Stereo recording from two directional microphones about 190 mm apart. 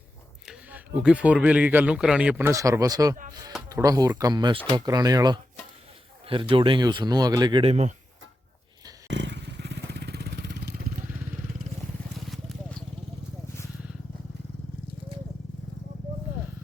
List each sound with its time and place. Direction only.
0.4 s speech: 5° right (ahead or behind); by 7.9 s 35° right (ahead or behind)
9.0 s vehicle: 65° right (ahead or behind)